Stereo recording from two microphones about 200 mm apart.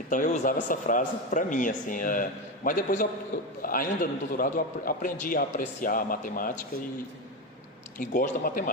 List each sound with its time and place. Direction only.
0.1 s a man's voice: 40° left (ahead or behind)
7.9 s a man's voice: 40° left (ahead or behind)